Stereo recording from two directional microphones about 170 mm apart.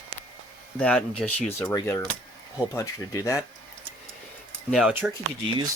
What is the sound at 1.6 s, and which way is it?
Speech, 20° left (ahead or behind).